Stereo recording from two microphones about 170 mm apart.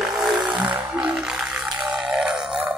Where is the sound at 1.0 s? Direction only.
5° right (ahead or behind).